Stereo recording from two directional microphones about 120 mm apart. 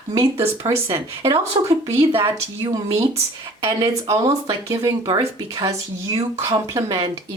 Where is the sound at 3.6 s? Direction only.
40° right (ahead or behind).